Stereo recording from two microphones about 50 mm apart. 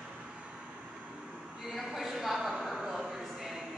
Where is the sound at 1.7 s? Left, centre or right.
Centre.